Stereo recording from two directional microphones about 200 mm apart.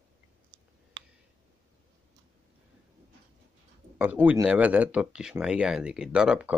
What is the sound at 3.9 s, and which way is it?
Speech, 10° right (ahead or behind).